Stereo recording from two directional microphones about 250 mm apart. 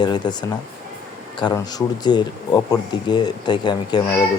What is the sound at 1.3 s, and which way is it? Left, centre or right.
Speech, centre.